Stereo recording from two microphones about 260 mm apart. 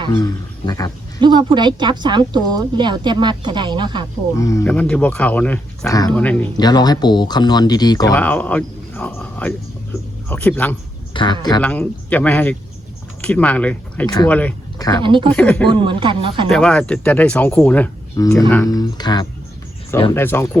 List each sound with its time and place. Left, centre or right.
0.1 s speech: centre
1.2 s speech: centre
4.4 s speech: centre
6.6 s speech: centre
11.1 s speech: centre
11.6 s speech: centre
15.0 s speech: centre
15.4 s speech: centre
15.7 s speech: centre
16.5 s speech: centre